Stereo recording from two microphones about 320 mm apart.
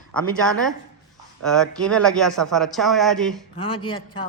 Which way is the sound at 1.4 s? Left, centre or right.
Centre.